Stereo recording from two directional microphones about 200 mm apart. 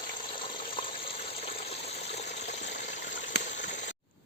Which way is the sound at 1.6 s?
30° left (ahead or behind).